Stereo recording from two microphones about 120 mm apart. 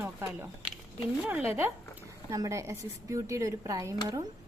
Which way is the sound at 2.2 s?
25° right (ahead or behind).